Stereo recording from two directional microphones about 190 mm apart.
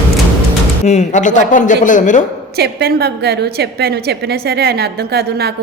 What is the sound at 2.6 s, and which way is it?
A woman's voice, 55° right (ahead or behind).